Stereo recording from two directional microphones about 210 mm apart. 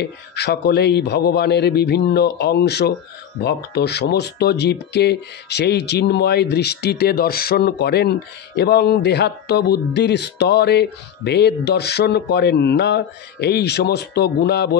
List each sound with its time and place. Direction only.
0.0 s speech: 50° left (ahead or behind)